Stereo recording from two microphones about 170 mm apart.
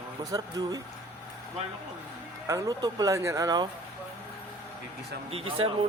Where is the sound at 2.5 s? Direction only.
20° right (ahead or behind).